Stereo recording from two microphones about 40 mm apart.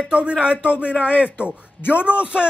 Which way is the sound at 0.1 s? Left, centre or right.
Right.